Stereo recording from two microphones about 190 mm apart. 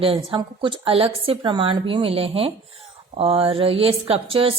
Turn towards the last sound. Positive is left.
turn(degrees=-30)  # may be behind; listen again after turning